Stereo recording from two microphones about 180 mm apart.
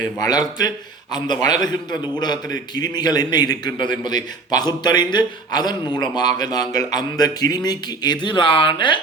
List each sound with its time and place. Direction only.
0.0 s a man's voice: 20° left (ahead or behind)